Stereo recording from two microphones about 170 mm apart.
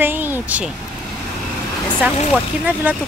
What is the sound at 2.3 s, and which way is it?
Speech, 10° right (ahead or behind).